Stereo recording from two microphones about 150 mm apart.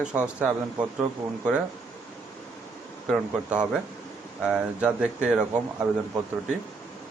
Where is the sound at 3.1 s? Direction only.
5° right (ahead or behind).